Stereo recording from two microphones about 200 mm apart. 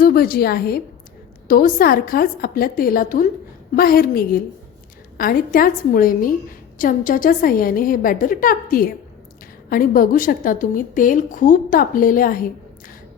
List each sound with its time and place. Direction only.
0.0 s a woman's voice: 45° left (ahead or behind)